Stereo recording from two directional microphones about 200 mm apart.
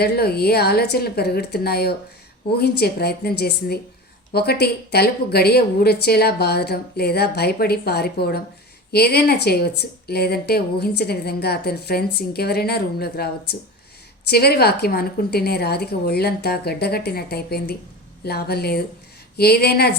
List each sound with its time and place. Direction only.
0.0 s a woman's voice: 50° left (ahead or behind)